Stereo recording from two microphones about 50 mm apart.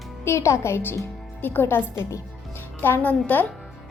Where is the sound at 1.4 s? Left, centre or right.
Left.